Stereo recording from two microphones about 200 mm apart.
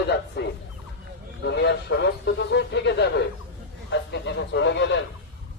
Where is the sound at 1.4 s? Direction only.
60° left (ahead or behind).